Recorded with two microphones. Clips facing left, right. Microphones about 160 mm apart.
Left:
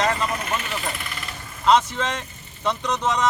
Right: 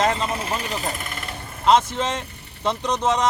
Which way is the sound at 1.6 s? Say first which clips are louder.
Right 1 dB; 25° right (ahead or behind).